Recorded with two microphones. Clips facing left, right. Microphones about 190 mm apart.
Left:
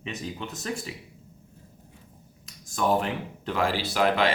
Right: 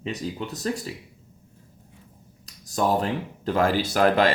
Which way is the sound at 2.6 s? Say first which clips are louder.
Right 2 dB; 40° right (ahead or behind).